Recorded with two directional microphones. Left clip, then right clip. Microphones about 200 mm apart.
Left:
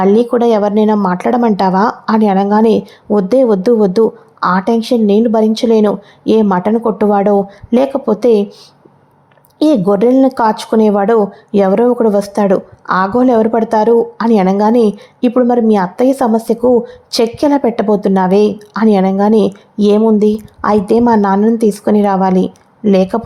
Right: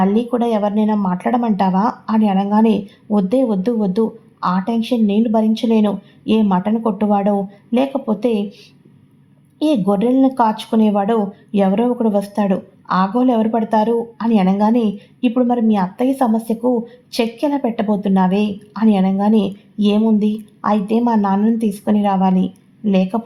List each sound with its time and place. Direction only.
0.0 s speech: 30° left (ahead or behind)
9.6 s speech: 30° left (ahead or behind)
21.3 s a woman's voice: 15° left (ahead or behind)
21.6 s speech: 30° left (ahead or behind)